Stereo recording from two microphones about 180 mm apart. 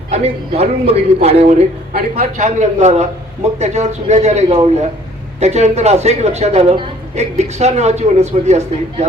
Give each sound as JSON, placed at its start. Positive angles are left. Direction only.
{"t": 0.1, "sound": "a man's voice", "side_deg": -35}